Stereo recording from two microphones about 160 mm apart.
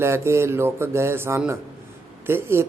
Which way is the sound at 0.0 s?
15° right (ahead or behind).